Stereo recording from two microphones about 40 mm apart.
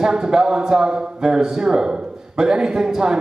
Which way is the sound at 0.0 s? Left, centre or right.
Centre.